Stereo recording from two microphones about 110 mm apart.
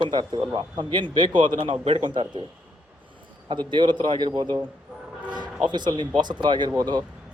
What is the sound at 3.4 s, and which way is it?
Speech, 45° right (ahead or behind).